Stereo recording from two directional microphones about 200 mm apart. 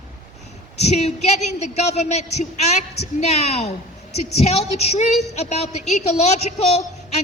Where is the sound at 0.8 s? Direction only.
35° left (ahead or behind).